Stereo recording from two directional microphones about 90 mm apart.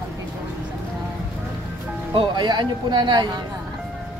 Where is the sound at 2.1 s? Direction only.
55° right (ahead or behind).